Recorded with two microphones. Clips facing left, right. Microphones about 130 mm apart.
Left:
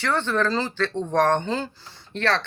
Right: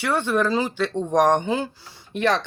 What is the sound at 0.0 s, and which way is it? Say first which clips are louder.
Speech: right 2 dB; 10° right (ahead or behind).